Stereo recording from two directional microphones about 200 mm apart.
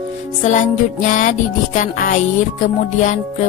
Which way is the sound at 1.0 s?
40° left (ahead or behind).